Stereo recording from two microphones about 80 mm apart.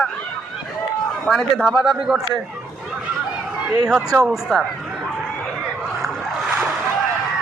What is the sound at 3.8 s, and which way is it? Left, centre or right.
Speech, centre.